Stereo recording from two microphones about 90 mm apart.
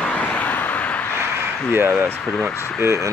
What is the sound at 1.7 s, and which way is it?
Speech, 25° right (ahead or behind).